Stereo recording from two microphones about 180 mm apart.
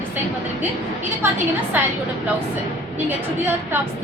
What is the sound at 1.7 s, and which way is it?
Speech, 10° right (ahead or behind).